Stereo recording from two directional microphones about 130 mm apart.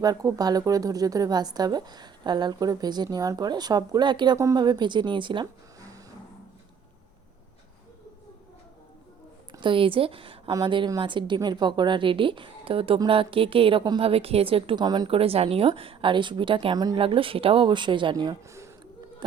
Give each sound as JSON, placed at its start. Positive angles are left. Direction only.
{"t": 0.0, "sound": "speech", "side_deg": -30}
{"t": 9.5, "sound": "a woman's voice", "side_deg": -40}
{"t": 17.0, "sound": "speech", "side_deg": -40}
{"t": 18.4, "sound": "a sound", "side_deg": -25}